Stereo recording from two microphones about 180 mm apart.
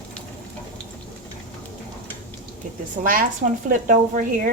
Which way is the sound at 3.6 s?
45° right (ahead or behind).